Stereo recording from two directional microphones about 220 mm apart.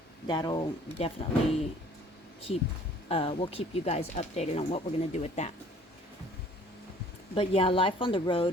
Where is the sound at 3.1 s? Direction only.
25° left (ahead or behind).